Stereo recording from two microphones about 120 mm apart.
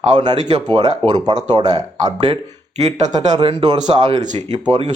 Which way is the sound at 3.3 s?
40° right (ahead or behind).